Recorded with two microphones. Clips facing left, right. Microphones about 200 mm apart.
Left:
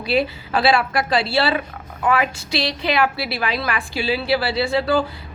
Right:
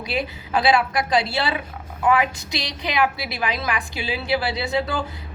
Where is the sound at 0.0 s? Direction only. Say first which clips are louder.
Left 6 dB; 15° right (ahead or behind).